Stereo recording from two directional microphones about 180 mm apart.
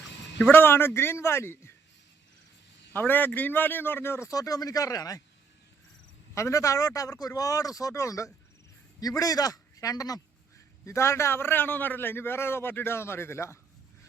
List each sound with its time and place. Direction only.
0.5 s a man's voice: 10° left (ahead or behind)
2.9 s a man's voice: 10° left (ahead or behind)
6.3 s a man's voice: 15° left (ahead or behind)